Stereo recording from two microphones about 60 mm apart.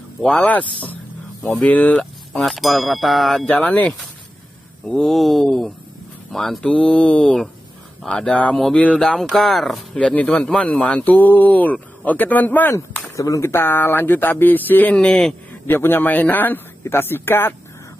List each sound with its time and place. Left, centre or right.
0.2 s speech: centre
0.5 s speech: left
2.3 s a sound: centre
3.4 s speech: left
5.0 s a sound: centre
6.6 s speech: centre
8.7 s speech: left
9.0 s a sound: centre
9.9 s speech: left
10.9 s speech: left
13.1 s speech: left
13.5 s speech: left
15.0 s speech: centre
15.6 s speech: left